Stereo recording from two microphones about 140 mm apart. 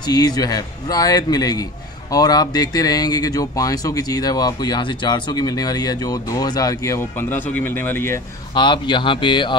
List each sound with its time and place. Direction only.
0.0 s a man's voice: 30° left (ahead or behind)
8.5 s speech: 35° left (ahead or behind)